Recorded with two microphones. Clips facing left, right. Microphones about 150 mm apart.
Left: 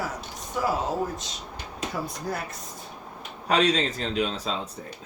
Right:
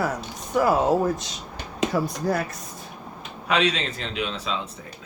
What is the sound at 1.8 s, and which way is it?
Speech, 85° right.